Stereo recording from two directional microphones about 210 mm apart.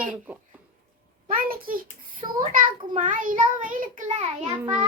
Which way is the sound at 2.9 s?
35° right (ahead or behind).